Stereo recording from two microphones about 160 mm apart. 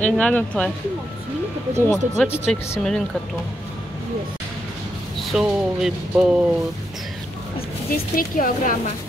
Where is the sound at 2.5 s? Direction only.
5° left (ahead or behind).